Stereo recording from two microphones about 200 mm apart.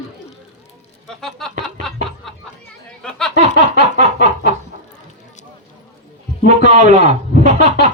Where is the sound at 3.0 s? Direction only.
5° left (ahead or behind).